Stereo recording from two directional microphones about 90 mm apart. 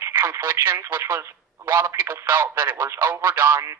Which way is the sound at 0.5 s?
25° right (ahead or behind).